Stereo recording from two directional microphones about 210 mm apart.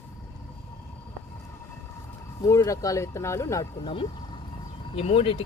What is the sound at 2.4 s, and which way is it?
Speech, 15° left (ahead or behind).